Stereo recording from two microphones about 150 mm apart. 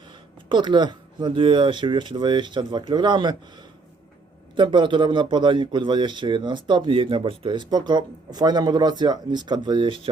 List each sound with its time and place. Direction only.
0.4 s a man's voice: 30° right (ahead or behind)
4.5 s a man's voice: 30° right (ahead or behind)